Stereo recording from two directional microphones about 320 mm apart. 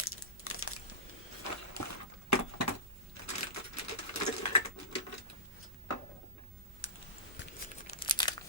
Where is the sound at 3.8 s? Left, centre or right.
Left.